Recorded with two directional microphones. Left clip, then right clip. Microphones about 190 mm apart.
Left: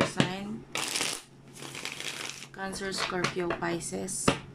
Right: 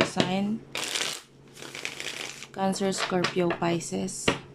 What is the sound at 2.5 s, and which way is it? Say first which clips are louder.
Speech: right 9 dB; 15° right (ahead or behind).